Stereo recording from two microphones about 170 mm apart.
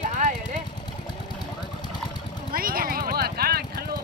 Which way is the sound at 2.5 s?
60° right (ahead or behind).